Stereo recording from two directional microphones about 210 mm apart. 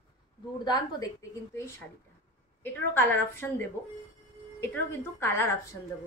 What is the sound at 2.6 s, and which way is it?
A woman's voice, 10° left (ahead or behind).